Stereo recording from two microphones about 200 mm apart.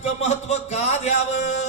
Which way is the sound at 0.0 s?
35° left (ahead or behind).